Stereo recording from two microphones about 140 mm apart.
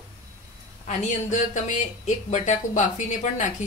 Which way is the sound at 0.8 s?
60° left (ahead or behind).